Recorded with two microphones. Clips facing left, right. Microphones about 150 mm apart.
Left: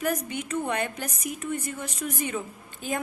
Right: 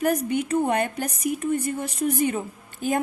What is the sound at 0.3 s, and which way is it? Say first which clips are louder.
Speech: right 7 dB; 35° right (ahead or behind).